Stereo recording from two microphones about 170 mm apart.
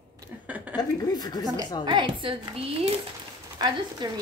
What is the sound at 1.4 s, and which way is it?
Speech, 20° right (ahead or behind).